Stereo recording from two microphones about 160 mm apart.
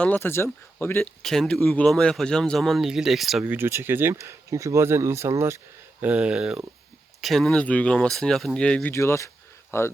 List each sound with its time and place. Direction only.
0.0 s speech: 10° left (ahead or behind)
1.2 s speech: centre (ahead or behind)
3.4 s speech: 15° right (ahead or behind); by 9.9 s 15° left (ahead or behind)